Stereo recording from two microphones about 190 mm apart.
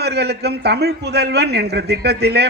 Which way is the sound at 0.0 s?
60° right (ahead or behind).